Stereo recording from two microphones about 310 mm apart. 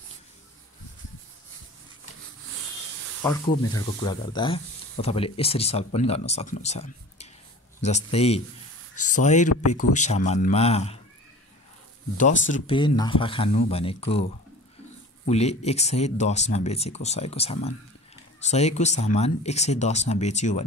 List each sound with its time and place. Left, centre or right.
3.2 s speech: centre
8.9 s a sound: left
9.2 s speech: left
12.2 s speech: left
15.2 s speech: left